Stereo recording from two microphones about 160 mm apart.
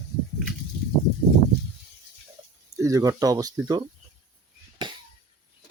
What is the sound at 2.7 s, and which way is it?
Speech, 20° right (ahead or behind).